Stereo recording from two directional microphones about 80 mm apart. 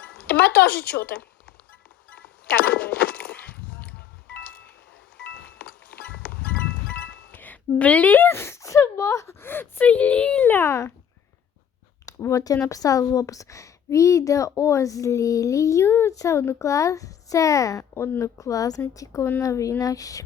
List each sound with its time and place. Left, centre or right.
0.0 s a sound: centre
2.6 s a sound: centre
5.1 s goat: centre
7.8 s speech: centre
10.5 s speech: left
12.0 s speech: left